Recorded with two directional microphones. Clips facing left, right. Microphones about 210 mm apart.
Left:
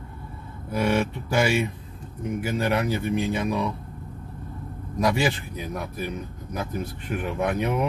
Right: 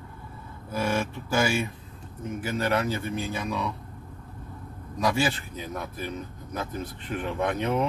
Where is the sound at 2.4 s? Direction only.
15° left (ahead or behind).